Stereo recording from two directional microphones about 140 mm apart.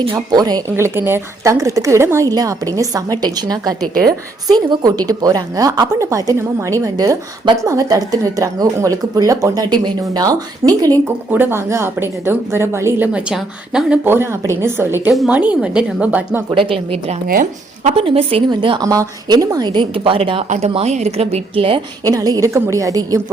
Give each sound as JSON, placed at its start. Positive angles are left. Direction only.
{"t": 0.0, "sound": "a woman's voice", "side_deg": -35}
{"t": 0.9, "sound": "a woman's voice", "side_deg": -15}
{"t": 11.3, "sound": "a woman's voice", "side_deg": -15}
{"t": 16.6, "sound": "a woman's voice", "side_deg": -40}
{"t": 17.2, "sound": "speech", "side_deg": -75}
{"t": 17.9, "sound": "a woman's voice", "side_deg": -40}
{"t": 22.0, "sound": "a woman's voice", "side_deg": -25}